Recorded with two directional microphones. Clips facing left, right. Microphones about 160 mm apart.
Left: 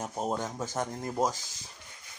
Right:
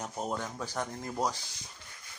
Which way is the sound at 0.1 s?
20° left (ahead or behind).